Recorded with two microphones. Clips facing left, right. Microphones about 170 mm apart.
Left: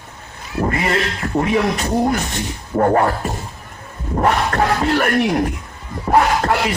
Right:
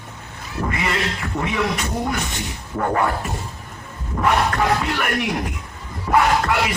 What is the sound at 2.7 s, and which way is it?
Speech, 40° left (ahead or behind).